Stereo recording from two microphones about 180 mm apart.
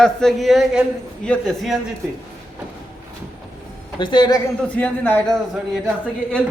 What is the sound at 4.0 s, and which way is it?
Speech, 25° left (ahead or behind).